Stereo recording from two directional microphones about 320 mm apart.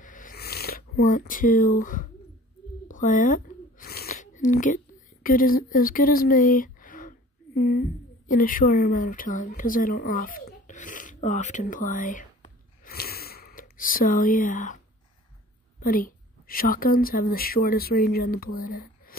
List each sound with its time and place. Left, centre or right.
0.0 s a sound: left
8.3 s speech: left
15.8 s a woman's voice: left